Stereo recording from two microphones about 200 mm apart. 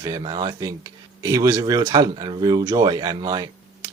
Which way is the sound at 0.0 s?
20° right (ahead or behind).